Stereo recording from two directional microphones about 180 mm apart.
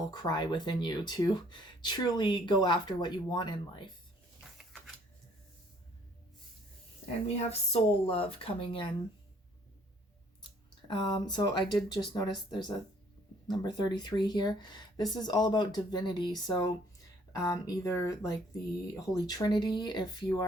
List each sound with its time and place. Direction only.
0.1 s speech: 25° left (ahead or behind)
4.4 s a sound: centre (ahead or behind)
7.0 s speech: 35° left (ahead or behind)
10.8 s speech: 25° left (ahead or behind)